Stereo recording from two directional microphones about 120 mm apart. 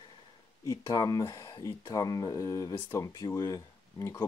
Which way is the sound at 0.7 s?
30° left (ahead or behind).